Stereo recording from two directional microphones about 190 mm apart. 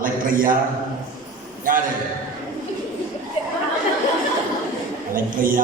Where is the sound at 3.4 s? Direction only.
30° left (ahead or behind).